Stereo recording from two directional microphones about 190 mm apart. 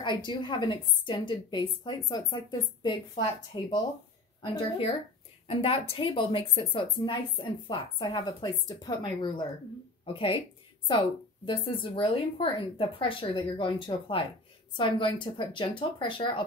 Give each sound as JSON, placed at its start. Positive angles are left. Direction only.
{"t": 0.0, "sound": "a woman's voice", "side_deg": 25}
{"t": 3.5, "sound": "a woman's voice", "side_deg": 25}